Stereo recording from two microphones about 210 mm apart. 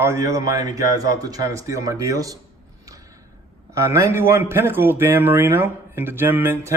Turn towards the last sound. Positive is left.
turn(degrees=-10)  # may be behind; listen again after turning